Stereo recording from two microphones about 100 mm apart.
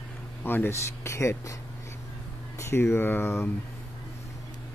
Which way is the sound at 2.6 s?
25° left (ahead or behind).